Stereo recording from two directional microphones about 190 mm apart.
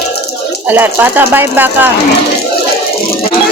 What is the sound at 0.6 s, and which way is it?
Speech, 10° right (ahead or behind).